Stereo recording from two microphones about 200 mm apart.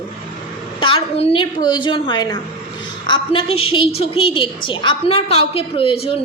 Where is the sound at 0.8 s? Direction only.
25° left (ahead or behind).